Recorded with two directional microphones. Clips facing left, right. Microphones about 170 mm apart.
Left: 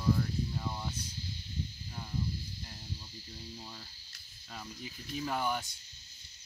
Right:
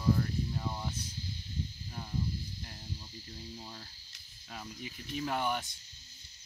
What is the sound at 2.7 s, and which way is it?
Speech, 15° right (ahead or behind).